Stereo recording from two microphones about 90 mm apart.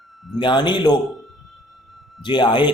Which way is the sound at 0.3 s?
60° left (ahead or behind).